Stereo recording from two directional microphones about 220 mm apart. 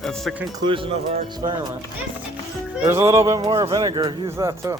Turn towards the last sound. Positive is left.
turn(degrees=-15)  # may be behind; listen again after turning